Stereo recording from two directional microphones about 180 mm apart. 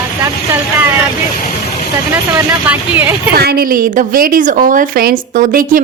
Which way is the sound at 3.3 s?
60° right (ahead or behind).